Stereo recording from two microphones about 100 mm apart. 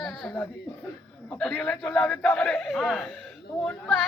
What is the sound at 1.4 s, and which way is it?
A man's voice, 10° left (ahead or behind).